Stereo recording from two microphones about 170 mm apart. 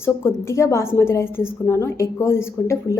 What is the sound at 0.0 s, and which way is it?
A woman's voice, 15° left (ahead or behind).